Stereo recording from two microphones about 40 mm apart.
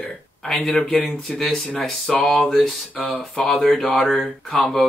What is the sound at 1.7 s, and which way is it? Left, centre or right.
Speech, left.